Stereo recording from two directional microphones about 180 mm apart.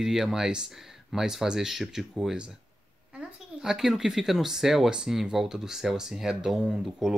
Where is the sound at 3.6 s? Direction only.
Centre (ahead or behind).